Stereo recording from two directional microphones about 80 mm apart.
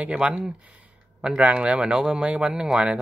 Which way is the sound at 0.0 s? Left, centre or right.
Centre.